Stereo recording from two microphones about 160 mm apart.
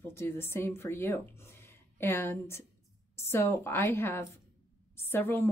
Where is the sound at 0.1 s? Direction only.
15° left (ahead or behind).